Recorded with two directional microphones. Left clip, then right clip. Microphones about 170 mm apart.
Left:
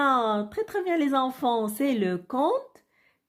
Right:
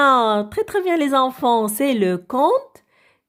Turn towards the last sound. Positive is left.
turn(degrees=-25)  # may be behind; listen again after turning